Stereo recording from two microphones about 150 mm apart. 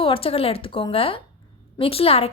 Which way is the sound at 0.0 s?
40° left (ahead or behind).